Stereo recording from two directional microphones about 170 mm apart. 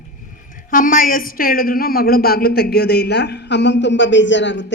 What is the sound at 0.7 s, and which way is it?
A woman's voice, 55° left (ahead or behind).